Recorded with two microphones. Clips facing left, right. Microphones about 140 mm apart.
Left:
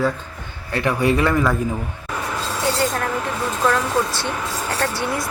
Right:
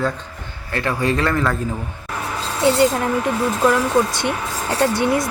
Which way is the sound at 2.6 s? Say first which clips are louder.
Right 7 dB; 20° right (ahead or behind).